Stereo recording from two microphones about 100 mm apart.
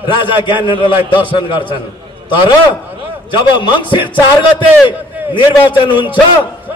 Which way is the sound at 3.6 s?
55° left (ahead or behind).